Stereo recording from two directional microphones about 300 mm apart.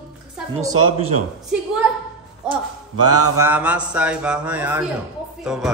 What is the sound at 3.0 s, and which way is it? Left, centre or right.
Speech, right.